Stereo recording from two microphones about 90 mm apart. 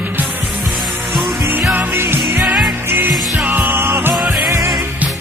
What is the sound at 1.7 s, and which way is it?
Music, 20° right (ahead or behind).